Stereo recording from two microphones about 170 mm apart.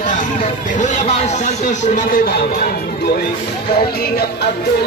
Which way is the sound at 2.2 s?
60° left (ahead or behind).